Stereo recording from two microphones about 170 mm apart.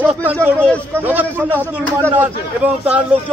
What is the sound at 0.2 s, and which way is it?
A man's voice, 10° right (ahead or behind).